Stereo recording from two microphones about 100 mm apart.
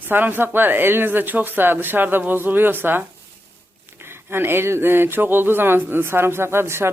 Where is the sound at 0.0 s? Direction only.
20° right (ahead or behind).